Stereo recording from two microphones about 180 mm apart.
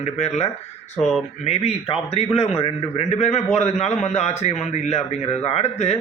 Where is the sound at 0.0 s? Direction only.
40° left (ahead or behind).